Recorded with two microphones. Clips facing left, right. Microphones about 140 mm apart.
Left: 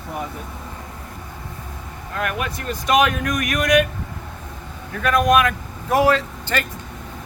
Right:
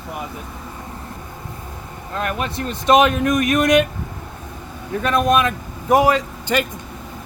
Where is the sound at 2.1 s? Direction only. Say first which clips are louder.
Right 2 dB; 25° right (ahead or behind).